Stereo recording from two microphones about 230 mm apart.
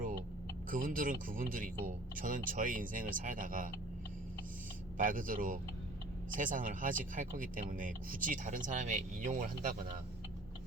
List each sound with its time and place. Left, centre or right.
0.7 s speech: right
4.9 s speech: right